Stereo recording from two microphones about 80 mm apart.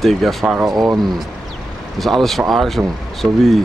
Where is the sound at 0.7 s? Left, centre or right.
Right.